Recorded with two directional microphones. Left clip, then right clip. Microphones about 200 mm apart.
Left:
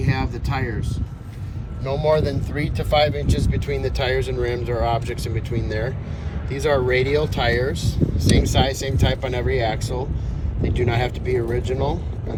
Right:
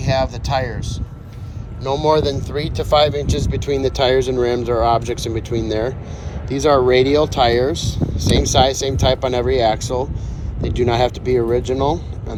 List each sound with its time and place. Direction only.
1.8 s speech: 15° right (ahead or behind)